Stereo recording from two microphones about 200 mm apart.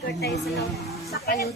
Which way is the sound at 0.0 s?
55° left (ahead or behind).